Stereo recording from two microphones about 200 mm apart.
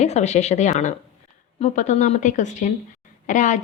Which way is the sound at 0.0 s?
35° left (ahead or behind).